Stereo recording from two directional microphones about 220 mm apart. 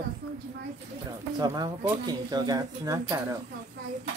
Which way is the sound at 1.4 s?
15° right (ahead or behind).